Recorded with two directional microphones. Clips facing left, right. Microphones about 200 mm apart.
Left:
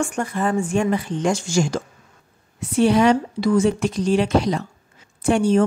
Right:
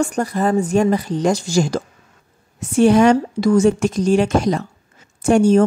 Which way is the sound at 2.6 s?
45° right (ahead or behind).